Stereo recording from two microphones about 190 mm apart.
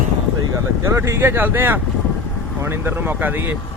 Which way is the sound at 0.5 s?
15° right (ahead or behind).